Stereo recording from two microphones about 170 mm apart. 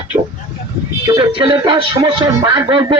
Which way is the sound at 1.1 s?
25° right (ahead or behind).